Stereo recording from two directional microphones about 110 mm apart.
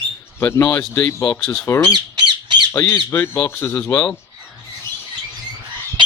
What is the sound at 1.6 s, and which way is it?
Speech, 25° left (ahead or behind).